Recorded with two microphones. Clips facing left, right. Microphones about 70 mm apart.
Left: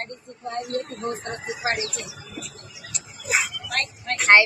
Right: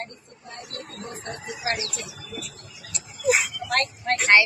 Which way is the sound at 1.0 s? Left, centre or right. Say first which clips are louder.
Left 6 dB; left.